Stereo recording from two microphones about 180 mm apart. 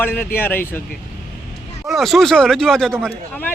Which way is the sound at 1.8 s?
Centre (ahead or behind).